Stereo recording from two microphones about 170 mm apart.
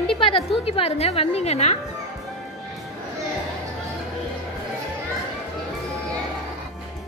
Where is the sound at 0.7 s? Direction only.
35° left (ahead or behind).